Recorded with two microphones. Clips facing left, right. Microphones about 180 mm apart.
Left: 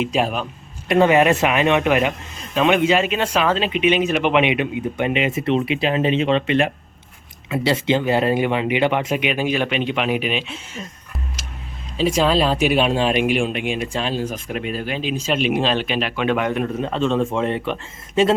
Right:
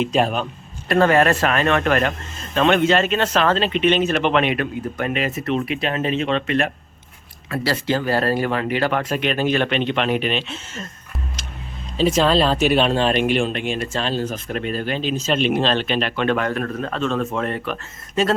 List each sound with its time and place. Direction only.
0.0 s speech: 5° left (ahead or behind)
5.4 s speech: 30° left (ahead or behind)
7.5 s speech: 20° left (ahead or behind); by 10.8 s 5° left (ahead or behind)
11.9 s speech: 5° left (ahead or behind)
16.5 s speech: 15° left (ahead or behind)
16.9 s speech: 30° left (ahead or behind)